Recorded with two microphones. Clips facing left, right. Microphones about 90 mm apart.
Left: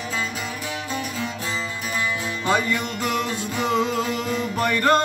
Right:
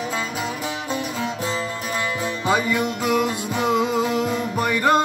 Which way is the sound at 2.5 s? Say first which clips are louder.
Right 1 dB; 10° right (ahead or behind).